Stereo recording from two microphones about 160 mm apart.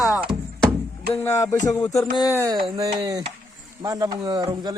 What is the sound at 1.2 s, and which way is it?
Music, 15° left (ahead or behind).